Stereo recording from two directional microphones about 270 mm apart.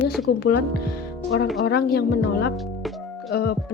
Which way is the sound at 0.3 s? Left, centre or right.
Left.